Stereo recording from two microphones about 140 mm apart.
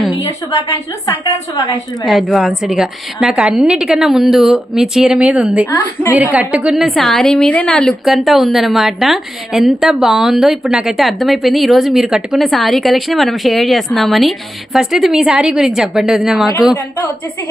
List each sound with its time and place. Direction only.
0.2 s a woman's voice: 25° left (ahead or behind)
2.0 s a woman's voice: centre (ahead or behind)
5.7 s a woman's voice: 15° left (ahead or behind)
6.1 s a woman's voice: 10° right (ahead or behind)